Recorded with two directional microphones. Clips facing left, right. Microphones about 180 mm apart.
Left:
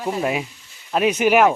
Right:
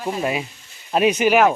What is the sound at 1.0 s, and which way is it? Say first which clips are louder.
Speech: right 1 dB; 5° right (ahead or behind).